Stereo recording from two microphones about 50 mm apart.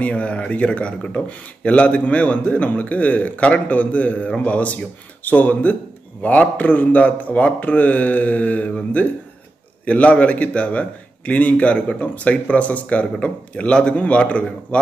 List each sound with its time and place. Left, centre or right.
0.0 s a man's voice: left